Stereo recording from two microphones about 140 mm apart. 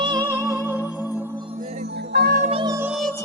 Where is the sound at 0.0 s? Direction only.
30° right (ahead or behind).